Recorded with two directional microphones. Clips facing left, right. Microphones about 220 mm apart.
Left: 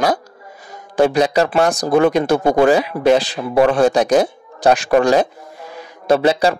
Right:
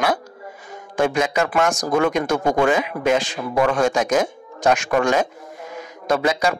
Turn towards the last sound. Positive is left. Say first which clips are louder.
# left 6 dB
turn(degrees=30)  # may be behind; listen again after turning